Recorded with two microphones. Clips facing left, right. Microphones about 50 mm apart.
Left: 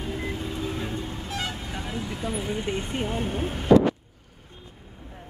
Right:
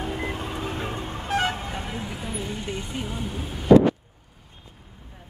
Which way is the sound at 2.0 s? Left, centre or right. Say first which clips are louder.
Left 3 dB; centre.